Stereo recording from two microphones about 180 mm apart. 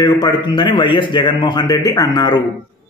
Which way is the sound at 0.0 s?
25° left (ahead or behind).